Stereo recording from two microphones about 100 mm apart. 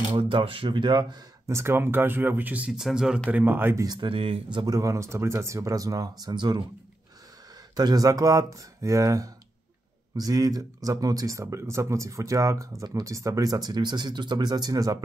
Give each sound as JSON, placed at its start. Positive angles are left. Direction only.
{"t": 0.1, "sound": "speech", "side_deg": -60}
{"t": 1.5, "sound": "speech", "side_deg": -25}
{"t": 3.3, "sound": "speech", "side_deg": -15}
{"t": 3.8, "sound": "speech", "side_deg": -45}
{"t": 4.1, "sound": "speech", "side_deg": -70}
{"t": 4.6, "sound": "speech", "side_deg": -35}
{"t": 7.7, "sound": "speech", "side_deg": -40}